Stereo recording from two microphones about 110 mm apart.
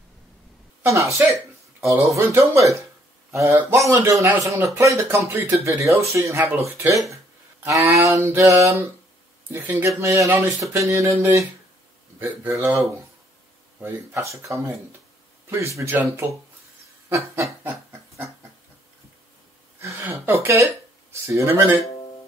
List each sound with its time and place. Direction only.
0.8 s speech: 30° right (ahead or behind)
3.9 s speech: 25° right (ahead or behind)
13.8 s speech: 25° right (ahead or behind)
17.1 s snicker: 25° right (ahead or behind)
20.0 s speech: 20° right (ahead or behind)